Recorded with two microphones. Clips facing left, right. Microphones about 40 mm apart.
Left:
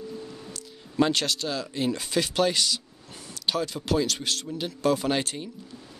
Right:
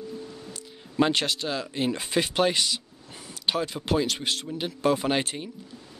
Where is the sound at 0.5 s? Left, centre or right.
Right.